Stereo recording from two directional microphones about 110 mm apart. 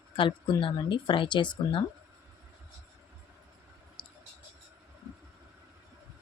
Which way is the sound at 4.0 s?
50° left (ahead or behind).